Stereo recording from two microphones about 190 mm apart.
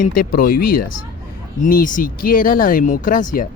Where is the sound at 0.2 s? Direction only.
50° left (ahead or behind).